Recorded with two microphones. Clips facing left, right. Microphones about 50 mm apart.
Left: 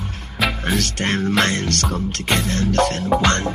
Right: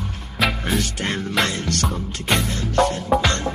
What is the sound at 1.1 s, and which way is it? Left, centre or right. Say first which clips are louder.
Music: left 5 dB; left.